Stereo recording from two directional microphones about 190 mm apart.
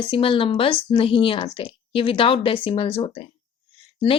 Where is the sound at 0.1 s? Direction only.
25° left (ahead or behind).